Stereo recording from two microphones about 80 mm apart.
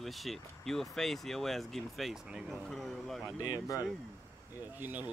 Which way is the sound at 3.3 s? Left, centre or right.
Right.